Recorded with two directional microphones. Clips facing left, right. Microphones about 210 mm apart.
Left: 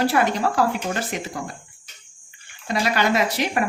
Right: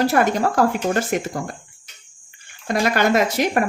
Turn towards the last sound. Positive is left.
turn(degrees=-45)  # may be behind; listen again after turning